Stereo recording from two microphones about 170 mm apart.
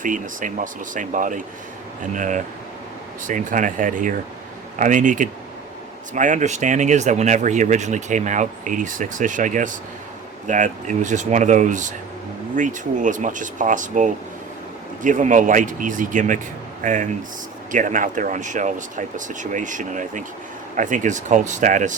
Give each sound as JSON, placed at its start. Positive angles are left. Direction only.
{"t": 0.0, "sound": "speech", "side_deg": -50}